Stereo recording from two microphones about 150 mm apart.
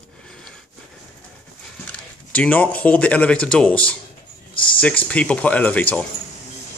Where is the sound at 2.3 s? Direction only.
10° left (ahead or behind).